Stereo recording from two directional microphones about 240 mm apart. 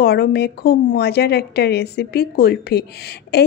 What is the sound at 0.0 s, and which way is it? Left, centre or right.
A woman's voice, left.